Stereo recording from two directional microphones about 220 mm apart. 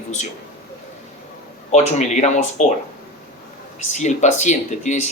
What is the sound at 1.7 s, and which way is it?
Speech, 30° left (ahead or behind).